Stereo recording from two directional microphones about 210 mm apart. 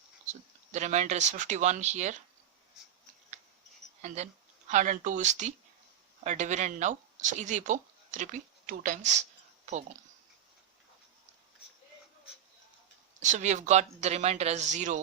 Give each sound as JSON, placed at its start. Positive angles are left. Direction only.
{"t": 0.3, "sound": "speech", "side_deg": -35}
{"t": 4.0, "sound": "speech", "side_deg": -35}
{"t": 13.1, "sound": "speech", "side_deg": -35}